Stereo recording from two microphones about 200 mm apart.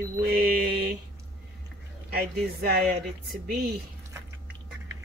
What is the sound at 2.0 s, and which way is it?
Speech, 50° right (ahead or behind).